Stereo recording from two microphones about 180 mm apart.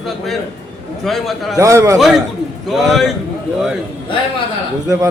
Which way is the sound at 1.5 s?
15° right (ahead or behind).